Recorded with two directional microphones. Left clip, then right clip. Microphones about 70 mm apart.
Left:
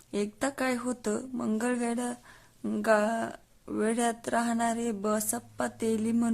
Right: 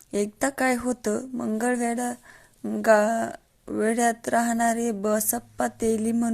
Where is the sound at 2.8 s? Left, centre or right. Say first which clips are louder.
Right 6 dB; right.